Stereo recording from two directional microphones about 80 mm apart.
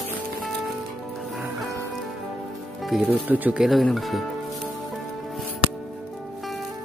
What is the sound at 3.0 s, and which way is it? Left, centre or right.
Speech, right.